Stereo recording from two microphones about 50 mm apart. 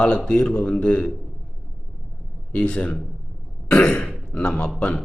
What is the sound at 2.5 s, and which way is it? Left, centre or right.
Speech, centre.